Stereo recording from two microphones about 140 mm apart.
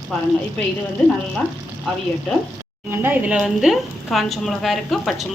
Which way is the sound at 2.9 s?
15° right (ahead or behind).